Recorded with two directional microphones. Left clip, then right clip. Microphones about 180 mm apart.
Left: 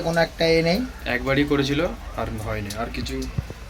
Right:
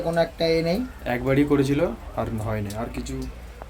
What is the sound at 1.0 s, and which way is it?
Speech, 60° right (ahead or behind).